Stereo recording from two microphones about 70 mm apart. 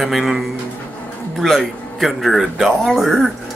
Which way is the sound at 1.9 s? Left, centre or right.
Centre.